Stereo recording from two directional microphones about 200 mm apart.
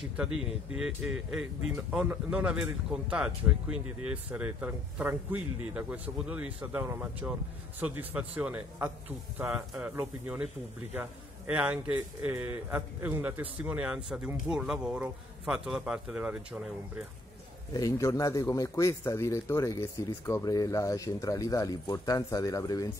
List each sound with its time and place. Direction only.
0.7 s a man's voice: 5° right (ahead or behind)
17.7 s speech: 15° left (ahead or behind)